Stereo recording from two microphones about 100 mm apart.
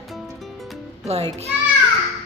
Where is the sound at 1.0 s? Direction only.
90° right.